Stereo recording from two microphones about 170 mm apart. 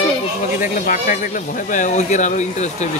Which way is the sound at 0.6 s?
50° left (ahead or behind).